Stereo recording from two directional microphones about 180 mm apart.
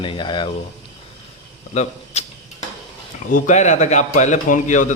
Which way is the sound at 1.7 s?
40° left (ahead or behind).